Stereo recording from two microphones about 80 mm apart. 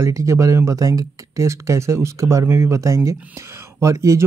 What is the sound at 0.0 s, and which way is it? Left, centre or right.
Speech, right.